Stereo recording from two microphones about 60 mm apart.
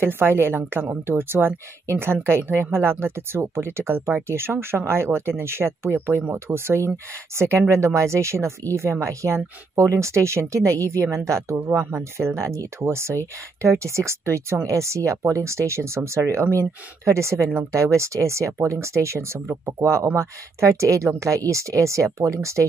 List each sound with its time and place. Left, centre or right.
0.0 s a woman's voice: right